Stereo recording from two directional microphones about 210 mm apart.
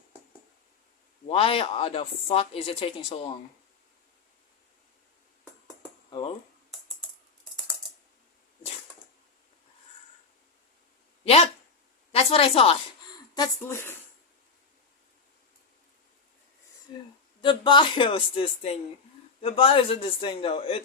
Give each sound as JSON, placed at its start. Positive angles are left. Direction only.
{"t": 1.3, "sound": "speech", "side_deg": 25}
{"t": 6.1, "sound": "speech", "side_deg": 20}
{"t": 12.1, "sound": "speech", "side_deg": 25}
{"t": 13.3, "sound": "speech", "side_deg": 15}
{"t": 17.4, "sound": "speech", "side_deg": 20}